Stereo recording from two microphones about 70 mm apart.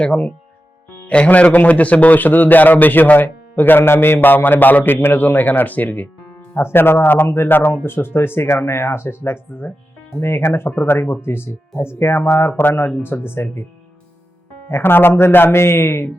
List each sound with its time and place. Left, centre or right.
0.0 s a man's voice: centre
6.5 s speech: left
14.7 s speech: left